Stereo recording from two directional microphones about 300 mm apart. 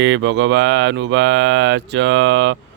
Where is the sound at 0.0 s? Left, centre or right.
Right.